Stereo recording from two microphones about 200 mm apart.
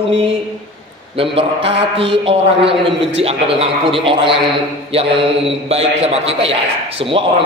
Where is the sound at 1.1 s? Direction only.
30° right (ahead or behind).